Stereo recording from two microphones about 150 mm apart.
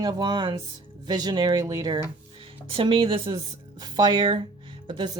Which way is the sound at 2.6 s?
35° right (ahead or behind).